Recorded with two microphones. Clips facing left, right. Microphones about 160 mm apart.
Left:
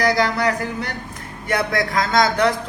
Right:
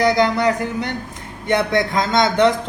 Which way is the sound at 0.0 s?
25° right (ahead or behind).